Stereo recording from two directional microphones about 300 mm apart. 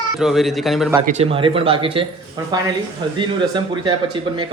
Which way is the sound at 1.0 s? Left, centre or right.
Right.